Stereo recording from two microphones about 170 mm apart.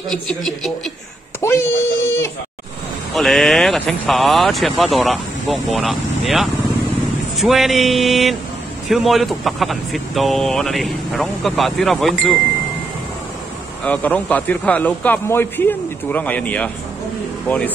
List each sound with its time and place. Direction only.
0.1 s speech: 5° left (ahead or behind)
1.4 s speech: 15° left (ahead or behind)
3.2 s speech: centre (ahead or behind)
13.8 s speech: 10° left (ahead or behind)